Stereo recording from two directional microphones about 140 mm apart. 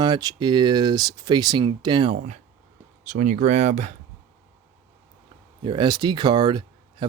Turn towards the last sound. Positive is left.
turn(degrees=-35)  # may be behind; listen again after turning